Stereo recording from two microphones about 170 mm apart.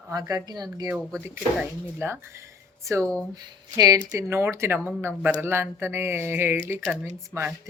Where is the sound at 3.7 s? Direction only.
20° right (ahead or behind).